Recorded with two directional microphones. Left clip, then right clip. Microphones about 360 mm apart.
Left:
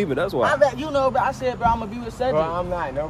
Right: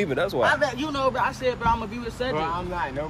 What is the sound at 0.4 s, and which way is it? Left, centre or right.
Speech, left.